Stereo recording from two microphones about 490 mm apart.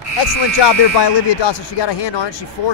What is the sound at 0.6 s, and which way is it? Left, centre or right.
Speech, left.